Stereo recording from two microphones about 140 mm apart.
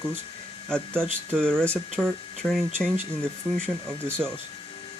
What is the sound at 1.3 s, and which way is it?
Speech, 5° left (ahead or behind).